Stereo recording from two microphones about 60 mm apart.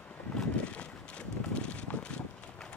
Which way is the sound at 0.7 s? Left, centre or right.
Centre.